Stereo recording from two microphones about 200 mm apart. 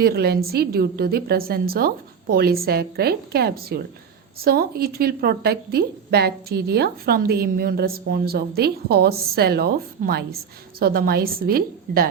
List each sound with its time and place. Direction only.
0.0 s a woman's voice: 50° right (ahead or behind)